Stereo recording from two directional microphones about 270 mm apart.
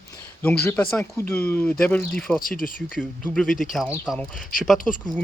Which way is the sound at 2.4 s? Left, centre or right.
Left.